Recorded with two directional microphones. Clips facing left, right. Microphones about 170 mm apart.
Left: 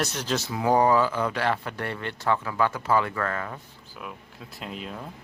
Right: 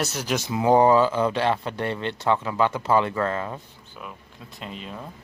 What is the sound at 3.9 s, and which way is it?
Speech, centre (ahead or behind).